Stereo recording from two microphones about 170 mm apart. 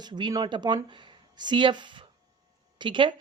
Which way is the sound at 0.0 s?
25° right (ahead or behind).